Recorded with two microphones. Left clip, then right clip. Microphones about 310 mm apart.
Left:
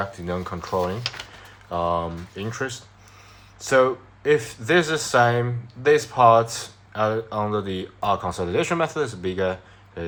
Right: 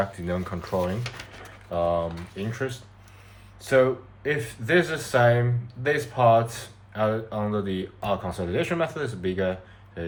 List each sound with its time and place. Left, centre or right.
0.0 s speech: centre